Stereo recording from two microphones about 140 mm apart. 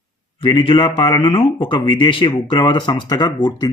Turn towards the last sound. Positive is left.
turn(degrees=30)  # may be behind; listen again after turning